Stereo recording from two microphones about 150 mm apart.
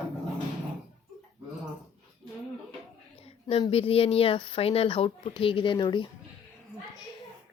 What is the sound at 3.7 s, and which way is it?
Speech, 40° left (ahead or behind).